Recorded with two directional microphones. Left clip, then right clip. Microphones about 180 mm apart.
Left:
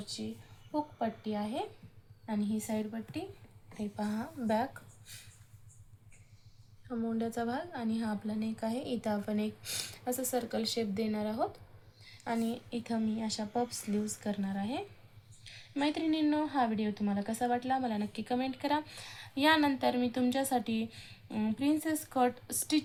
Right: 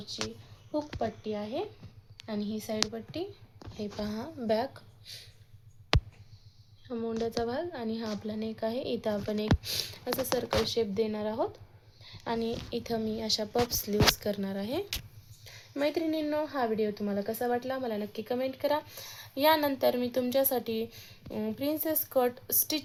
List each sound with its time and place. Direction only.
1.2 s a woman's voice: 50° right (ahead or behind)
6.8 s speech: 50° right (ahead or behind)
12.1 s a sound: 55° right (ahead or behind)
12.7 s a woman's voice: 60° right (ahead or behind)